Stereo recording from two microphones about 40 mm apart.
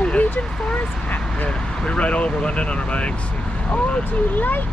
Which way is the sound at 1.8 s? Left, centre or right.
Left.